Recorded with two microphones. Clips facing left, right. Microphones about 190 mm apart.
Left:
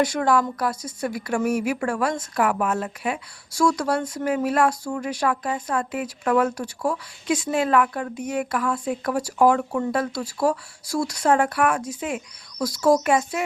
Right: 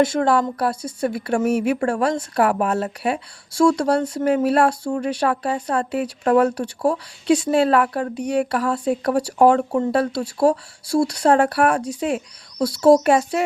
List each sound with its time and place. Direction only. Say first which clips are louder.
0.0 s a woman's voice: right 3 dB; 25° right (ahead or behind)